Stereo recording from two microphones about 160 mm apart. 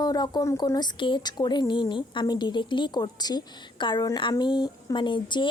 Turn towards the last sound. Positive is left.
turn(degrees=30)  # may be behind; listen again after turning